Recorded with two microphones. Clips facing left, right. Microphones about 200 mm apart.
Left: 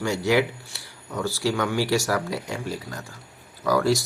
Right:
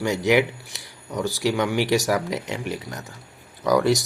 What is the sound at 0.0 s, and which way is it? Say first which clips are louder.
Speech: right 2 dB; 20° right (ahead or behind).